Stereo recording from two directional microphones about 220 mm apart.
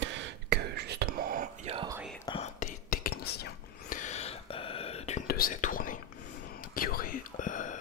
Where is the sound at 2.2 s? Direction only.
30° left (ahead or behind).